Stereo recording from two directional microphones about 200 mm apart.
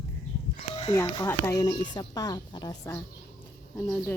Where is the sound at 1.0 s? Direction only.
15° left (ahead or behind).